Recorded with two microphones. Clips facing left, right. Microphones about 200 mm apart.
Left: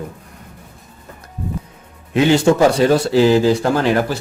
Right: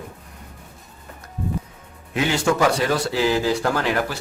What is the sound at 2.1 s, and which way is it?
Speech, 25° left (ahead or behind).